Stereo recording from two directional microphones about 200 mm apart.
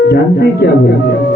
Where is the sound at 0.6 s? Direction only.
55° left (ahead or behind).